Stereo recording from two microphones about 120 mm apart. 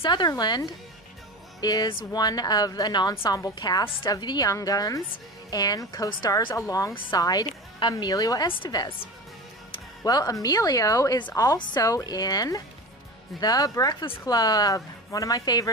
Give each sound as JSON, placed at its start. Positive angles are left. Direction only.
{"t": 0.0, "sound": "a woman's voice", "side_deg": 40}
{"t": 10.0, "sound": "a woman's voice", "side_deg": 30}